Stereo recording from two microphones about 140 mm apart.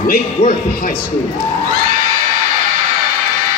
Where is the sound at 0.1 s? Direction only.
65° left (ahead or behind).